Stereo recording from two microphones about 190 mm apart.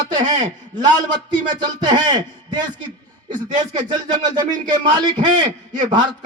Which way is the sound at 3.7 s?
20° right (ahead or behind).